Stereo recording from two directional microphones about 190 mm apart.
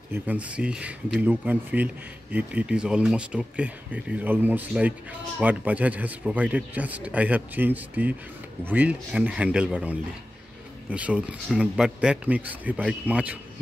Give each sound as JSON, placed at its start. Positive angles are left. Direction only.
{"t": 0.1, "sound": "speech", "side_deg": -10}